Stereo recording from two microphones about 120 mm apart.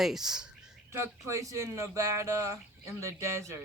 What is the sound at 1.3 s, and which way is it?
Speech, 25° right (ahead or behind).